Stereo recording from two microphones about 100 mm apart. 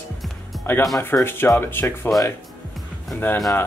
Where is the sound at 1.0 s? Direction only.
25° left (ahead or behind).